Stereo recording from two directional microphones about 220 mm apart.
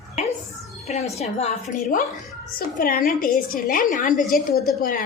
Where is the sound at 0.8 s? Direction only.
30° left (ahead or behind).